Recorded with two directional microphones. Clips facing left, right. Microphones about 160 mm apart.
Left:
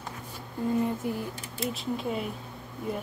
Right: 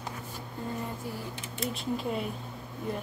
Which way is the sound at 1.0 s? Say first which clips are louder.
Left 7 dB; 20° left (ahead or behind).